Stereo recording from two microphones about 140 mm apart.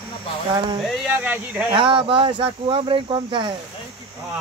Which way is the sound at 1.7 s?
40° right (ahead or behind).